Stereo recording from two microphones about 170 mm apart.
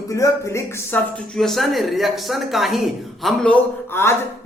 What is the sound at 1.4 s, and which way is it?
A man's voice, centre (ahead or behind).